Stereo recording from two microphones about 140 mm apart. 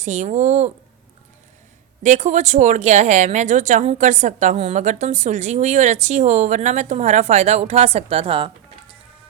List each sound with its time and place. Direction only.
0.0 s a woman's voice: 60° right (ahead or behind)
2.0 s a woman's voice: 60° right (ahead or behind); by 8.5 s 40° right (ahead or behind)